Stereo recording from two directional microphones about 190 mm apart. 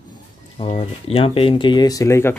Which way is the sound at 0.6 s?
30° left (ahead or behind).